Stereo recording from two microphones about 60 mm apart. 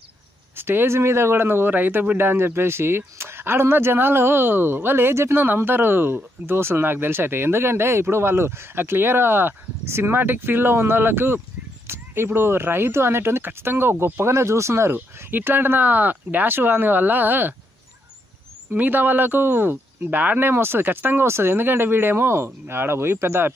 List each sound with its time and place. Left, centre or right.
0.6 s speech: right
15.1 s speech: right
18.7 s speech: right